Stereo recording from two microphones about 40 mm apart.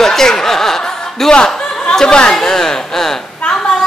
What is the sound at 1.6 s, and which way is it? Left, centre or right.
Snicker, left.